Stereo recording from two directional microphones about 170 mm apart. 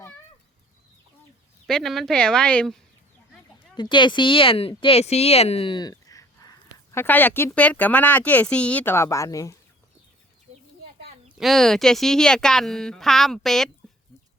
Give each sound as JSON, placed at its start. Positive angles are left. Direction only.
{"t": 1.6, "sound": "speech", "side_deg": 0}
{"t": 3.8, "sound": "speech", "side_deg": 25}
{"t": 11.3, "sound": "speech", "side_deg": 0}